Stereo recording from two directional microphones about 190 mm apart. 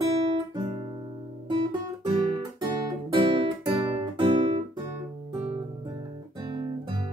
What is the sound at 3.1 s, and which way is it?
Guitar, 25° right (ahead or behind).